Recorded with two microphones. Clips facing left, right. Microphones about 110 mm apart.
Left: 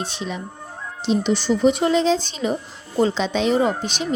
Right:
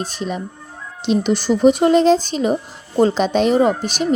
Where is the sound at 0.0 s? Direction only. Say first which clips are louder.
Right 4 dB; 45° right (ahead or behind).